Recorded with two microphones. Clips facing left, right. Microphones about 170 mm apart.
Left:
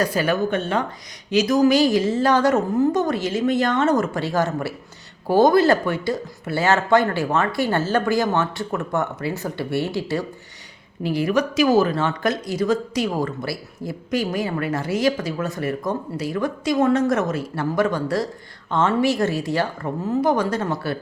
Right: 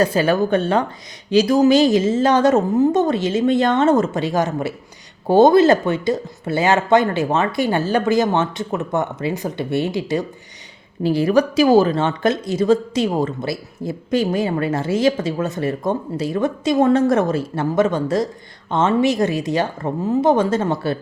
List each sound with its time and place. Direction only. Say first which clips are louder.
0.0 s a woman's voice: right 4 dB; 25° right (ahead or behind)
11.0 s speech: right 5 dB; 30° right (ahead or behind)